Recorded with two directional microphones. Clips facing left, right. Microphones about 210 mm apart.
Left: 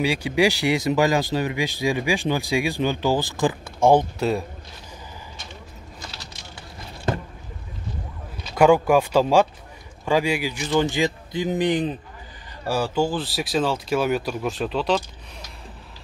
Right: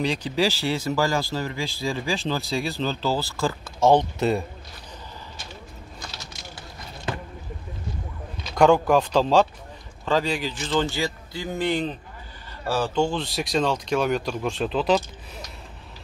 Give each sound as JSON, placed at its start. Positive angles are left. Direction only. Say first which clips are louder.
{"t": 0.0, "sound": "speech", "louder": "left 3 dB", "side_deg": 10}
{"t": 4.2, "sound": "speech", "louder": "even", "side_deg": 0}
{"t": 7.1, "sound": "boat", "louder": "left 5 dB", "side_deg": 45}
{"t": 8.5, "sound": "speech", "louder": "left 1 dB", "side_deg": 10}